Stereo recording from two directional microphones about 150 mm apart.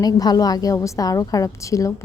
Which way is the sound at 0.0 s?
25° left (ahead or behind).